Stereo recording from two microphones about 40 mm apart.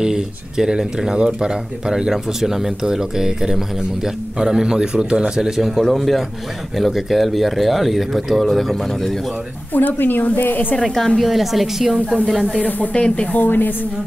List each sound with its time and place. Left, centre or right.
0.0 s speech: centre
5.9 s speech: centre
9.8 s a woman's voice: left
11.1 s speech: centre
12.5 s a woman's voice: left
12.9 s speech: left
13.4 s a woman's voice: left